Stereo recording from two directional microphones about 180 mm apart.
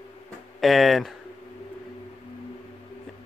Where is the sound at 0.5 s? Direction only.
Centre (ahead or behind).